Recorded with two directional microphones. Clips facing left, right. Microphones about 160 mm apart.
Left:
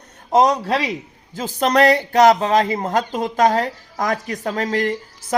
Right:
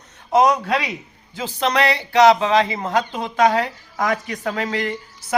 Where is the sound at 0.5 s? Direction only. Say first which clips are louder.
Left 1 dB; 35° left (ahead or behind).